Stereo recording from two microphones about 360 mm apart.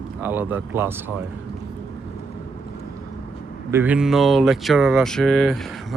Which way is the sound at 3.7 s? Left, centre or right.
Centre.